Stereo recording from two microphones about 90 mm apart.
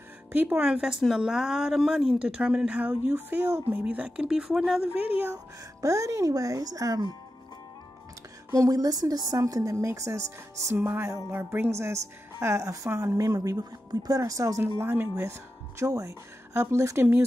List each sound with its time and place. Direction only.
0.3 s speech: 20° right (ahead or behind)
2.9 s speech: 25° right (ahead or behind)
5.8 s a woman's voice: 35° right (ahead or behind)
8.5 s a woman's voice: 40° right (ahead or behind)